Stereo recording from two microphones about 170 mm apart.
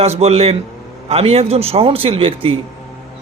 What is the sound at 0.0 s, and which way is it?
A man's voice, 35° right (ahead or behind).